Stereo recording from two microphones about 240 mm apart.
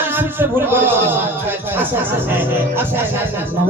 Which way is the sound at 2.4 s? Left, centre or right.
Centre.